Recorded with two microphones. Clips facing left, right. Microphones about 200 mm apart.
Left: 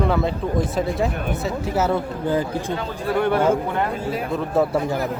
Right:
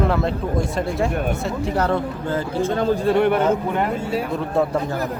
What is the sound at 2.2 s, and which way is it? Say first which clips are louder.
Speech: even; 15° left (ahead or behind).